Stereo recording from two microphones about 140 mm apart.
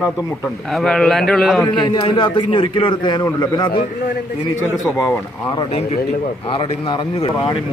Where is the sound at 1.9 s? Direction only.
35° left (ahead or behind).